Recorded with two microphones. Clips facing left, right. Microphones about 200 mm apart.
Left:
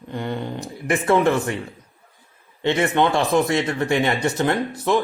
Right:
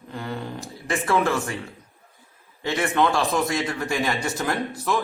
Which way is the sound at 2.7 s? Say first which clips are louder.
Left 3 dB; 25° left (ahead or behind).